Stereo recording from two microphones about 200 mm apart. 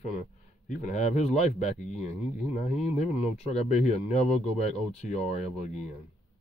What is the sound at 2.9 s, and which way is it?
Speech, 30° left (ahead or behind).